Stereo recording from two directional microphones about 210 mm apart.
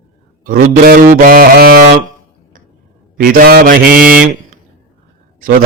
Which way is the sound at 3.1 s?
45° right (ahead or behind).